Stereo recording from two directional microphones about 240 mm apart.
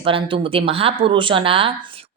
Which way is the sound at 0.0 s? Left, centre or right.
Right.